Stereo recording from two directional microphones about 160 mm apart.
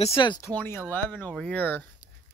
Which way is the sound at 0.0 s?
35° left (ahead or behind).